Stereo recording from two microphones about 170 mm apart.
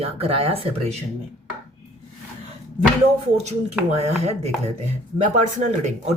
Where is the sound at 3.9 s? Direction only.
40° right (ahead or behind).